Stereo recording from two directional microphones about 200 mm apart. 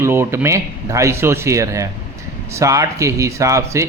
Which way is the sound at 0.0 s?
15° right (ahead or behind).